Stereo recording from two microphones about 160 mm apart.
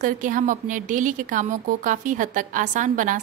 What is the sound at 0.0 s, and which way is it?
Speech, 55° right (ahead or behind).